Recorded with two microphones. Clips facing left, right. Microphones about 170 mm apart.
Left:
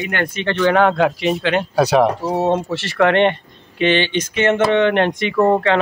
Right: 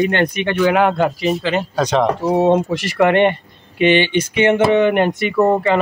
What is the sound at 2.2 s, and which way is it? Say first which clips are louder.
Speech: right 4 dB; 15° right (ahead or behind).